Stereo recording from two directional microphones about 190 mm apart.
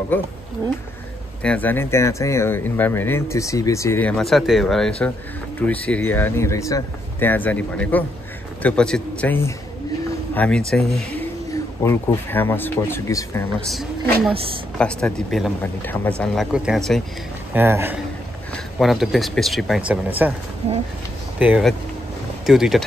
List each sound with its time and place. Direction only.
1.4 s speech: 5° left (ahead or behind)
11.5 s speech: 15° left (ahead or behind)
14.8 s speech: 5° left (ahead or behind)
17.6 s a man's voice: 10° right (ahead or behind)
18.5 s a man's voice: centre (ahead or behind)
21.4 s speech: 5° right (ahead or behind)